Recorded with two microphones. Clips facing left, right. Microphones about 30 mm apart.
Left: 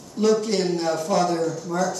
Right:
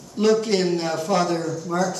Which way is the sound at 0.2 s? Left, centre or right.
Right.